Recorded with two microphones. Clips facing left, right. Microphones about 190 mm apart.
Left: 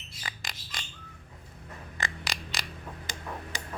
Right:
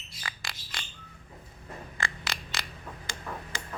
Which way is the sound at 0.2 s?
20° left (ahead or behind).